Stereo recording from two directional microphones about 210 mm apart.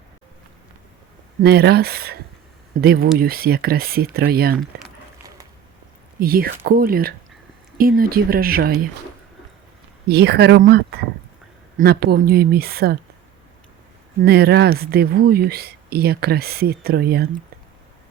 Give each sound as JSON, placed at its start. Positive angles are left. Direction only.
{"t": 1.4, "sound": "speech", "side_deg": -50}
{"t": 6.1, "sound": "speech", "side_deg": -45}
{"t": 10.1, "sound": "speech", "side_deg": -50}
{"t": 14.2, "sound": "speech", "side_deg": -50}